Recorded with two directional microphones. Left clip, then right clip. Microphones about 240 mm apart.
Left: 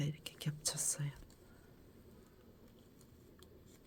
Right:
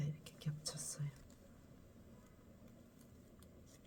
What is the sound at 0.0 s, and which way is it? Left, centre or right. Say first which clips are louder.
Whispering: left 6 dB; left.